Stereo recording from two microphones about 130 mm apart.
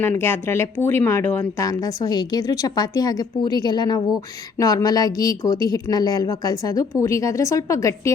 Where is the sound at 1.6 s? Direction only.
30° left (ahead or behind).